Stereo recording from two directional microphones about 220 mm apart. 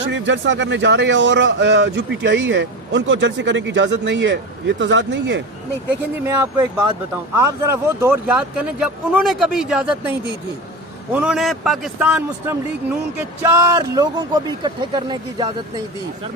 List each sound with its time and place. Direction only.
0.1 s a man's voice: 55° right (ahead or behind)
6.2 s speech: 15° right (ahead or behind)